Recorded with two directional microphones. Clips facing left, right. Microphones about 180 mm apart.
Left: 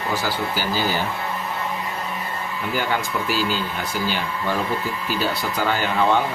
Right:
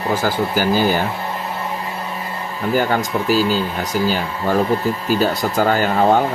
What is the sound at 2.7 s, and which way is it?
Speech, 40° right (ahead or behind).